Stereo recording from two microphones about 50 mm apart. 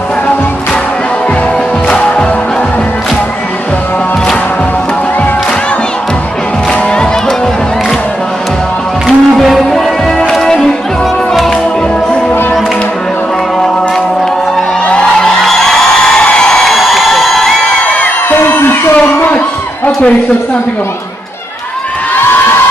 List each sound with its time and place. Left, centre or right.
1.9 s music: left
9.0 s music: centre
14.9 s music: centre
15.4 s music: centre
16.3 s a sound: centre
16.6 s a sound: centre
18.3 s music: left